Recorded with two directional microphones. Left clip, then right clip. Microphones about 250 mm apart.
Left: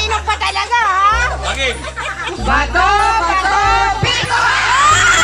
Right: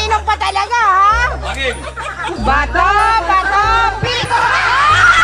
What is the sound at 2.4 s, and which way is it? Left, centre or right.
Music, right.